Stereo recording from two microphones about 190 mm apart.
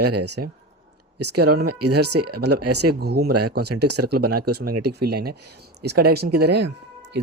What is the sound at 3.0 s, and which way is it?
Speech, 55° right (ahead or behind).